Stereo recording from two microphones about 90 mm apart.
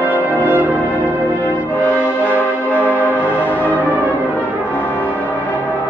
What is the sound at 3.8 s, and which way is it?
Music, 15° right (ahead or behind).